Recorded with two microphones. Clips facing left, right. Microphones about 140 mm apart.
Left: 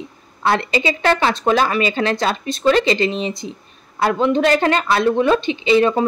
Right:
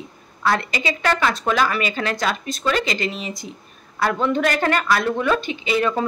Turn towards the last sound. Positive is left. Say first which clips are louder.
# left 6 dB
turn(degrees=25)  # may be behind; listen again after turning